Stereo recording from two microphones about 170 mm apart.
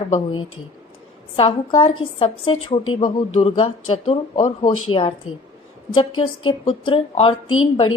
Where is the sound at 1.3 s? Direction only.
35° left (ahead or behind).